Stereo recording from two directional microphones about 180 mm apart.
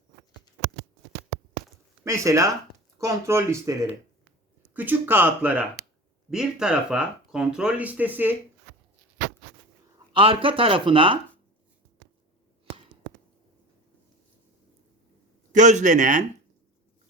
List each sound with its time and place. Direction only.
2.0 s speech: 15° right (ahead or behind)
10.2 s speech: 30° right (ahead or behind)
15.5 s a man's voice: 45° right (ahead or behind)